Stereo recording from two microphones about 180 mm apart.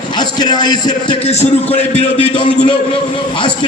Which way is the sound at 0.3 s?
25° left (ahead or behind).